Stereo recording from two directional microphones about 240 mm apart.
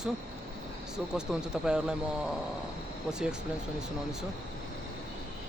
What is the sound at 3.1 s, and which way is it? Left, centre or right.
Speech, centre.